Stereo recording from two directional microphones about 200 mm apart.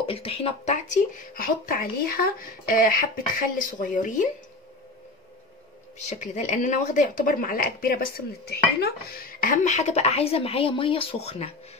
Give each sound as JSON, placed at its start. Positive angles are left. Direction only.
{"t": 0.0, "sound": "speech", "side_deg": 30}
{"t": 6.0, "sound": "speech", "side_deg": 40}